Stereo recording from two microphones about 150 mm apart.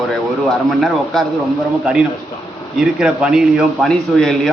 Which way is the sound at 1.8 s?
5° right (ahead or behind).